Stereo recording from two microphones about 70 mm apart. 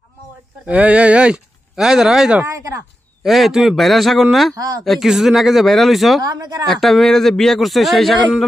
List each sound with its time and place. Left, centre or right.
0.7 s speech: centre
2.5 s speech: right
3.3 s speech: centre
4.6 s a woman's voice: right
4.8 s speech: centre
6.2 s speech: right
6.7 s speech: centre